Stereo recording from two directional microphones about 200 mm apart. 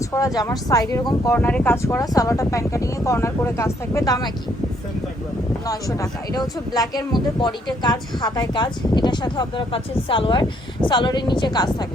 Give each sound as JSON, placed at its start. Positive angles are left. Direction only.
{"t": 0.1, "sound": "speech", "side_deg": 20}
{"t": 5.6, "sound": "speech", "side_deg": 20}